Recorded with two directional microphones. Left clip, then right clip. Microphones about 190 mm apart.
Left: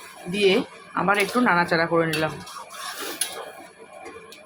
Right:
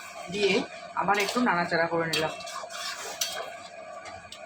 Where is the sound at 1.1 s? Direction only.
45° left (ahead or behind).